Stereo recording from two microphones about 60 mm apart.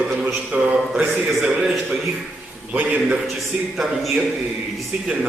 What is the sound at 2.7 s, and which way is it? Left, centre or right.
Speech, right.